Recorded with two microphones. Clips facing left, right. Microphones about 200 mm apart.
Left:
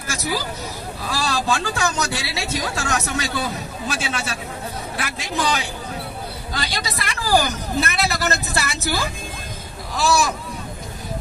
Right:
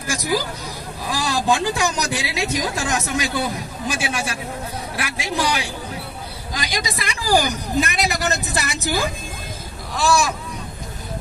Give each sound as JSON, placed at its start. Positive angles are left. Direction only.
{"t": 0.1, "sound": "a man's voice", "side_deg": -15}
{"t": 9.9, "sound": "speech", "side_deg": 0}